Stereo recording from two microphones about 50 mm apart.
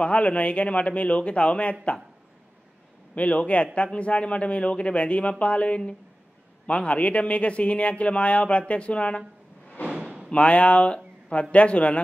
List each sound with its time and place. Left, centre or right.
0.0 s a man's voice: left
3.2 s a man's voice: left
10.0 s a sound: right
10.3 s a man's voice: left